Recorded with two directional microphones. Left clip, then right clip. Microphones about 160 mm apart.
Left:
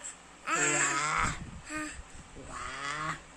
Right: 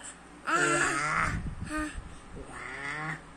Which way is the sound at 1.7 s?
Centre (ahead or behind).